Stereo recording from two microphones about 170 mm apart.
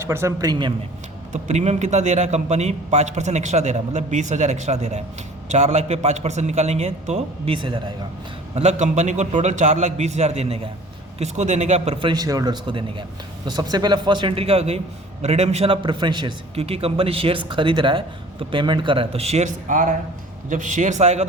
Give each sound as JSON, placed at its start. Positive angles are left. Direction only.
{"t": 0.0, "sound": "speech", "side_deg": -15}
{"t": 1.3, "sound": "a man's voice", "side_deg": -40}
{"t": 8.5, "sound": "a man's voice", "side_deg": -40}